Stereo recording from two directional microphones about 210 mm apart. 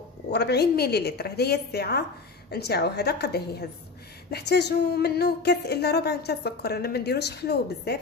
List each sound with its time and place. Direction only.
0.3 s speech: 50° left (ahead or behind)